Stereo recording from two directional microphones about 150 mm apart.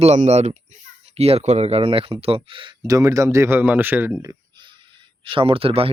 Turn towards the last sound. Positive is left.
turn(degrees=-40)  # may be behind; listen again after turning